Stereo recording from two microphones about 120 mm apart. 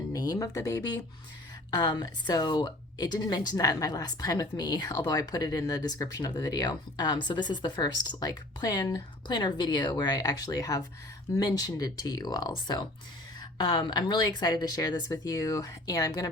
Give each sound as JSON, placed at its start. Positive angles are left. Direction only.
{"t": 0.1, "sound": "speech", "side_deg": 30}